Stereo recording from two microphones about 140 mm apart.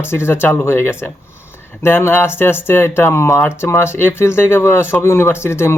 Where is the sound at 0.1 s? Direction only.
15° left (ahead or behind).